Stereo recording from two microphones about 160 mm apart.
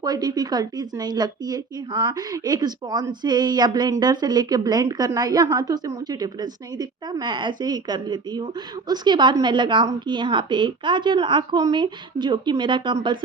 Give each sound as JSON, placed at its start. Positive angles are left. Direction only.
{"t": 0.0, "sound": "speech", "side_deg": -25}